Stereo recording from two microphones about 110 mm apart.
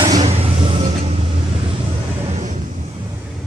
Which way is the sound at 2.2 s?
90° right.